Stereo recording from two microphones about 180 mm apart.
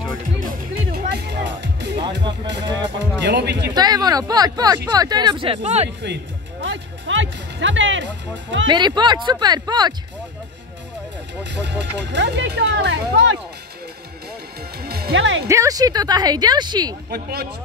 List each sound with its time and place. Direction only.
0.9 s music: 65° right (ahead or behind)
2.8 s speech: 75° right (ahead or behind)
3.7 s speech: 20° right (ahead or behind); by 5.9 s 35° right (ahead or behind)
6.6 s speech: 90° right
8.6 s speech: 25° right (ahead or behind)
11.6 s speech: 75° right (ahead or behind)
14.8 s music: 60° right (ahead or behind); by 15.4 s 90° right
15.4 s speech: 15° right (ahead or behind)
17.1 s speech: 60° right (ahead or behind)